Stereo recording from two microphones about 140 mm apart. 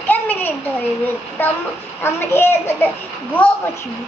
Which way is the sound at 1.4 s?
15° left (ahead or behind).